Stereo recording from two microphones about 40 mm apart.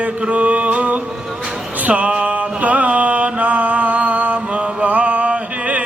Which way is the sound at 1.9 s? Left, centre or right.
Right.